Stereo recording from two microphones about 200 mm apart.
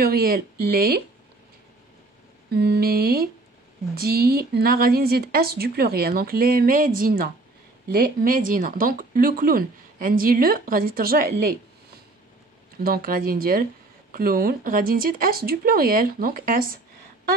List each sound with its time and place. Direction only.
0.0 s speech: 50° right (ahead or behind)
2.5 s speech: 50° right (ahead or behind)
12.8 s speech: 45° right (ahead or behind)